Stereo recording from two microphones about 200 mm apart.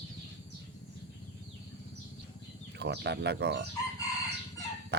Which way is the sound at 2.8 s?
55° right (ahead or behind).